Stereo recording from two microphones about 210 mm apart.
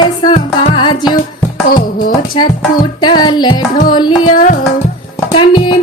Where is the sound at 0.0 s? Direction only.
20° left (ahead or behind).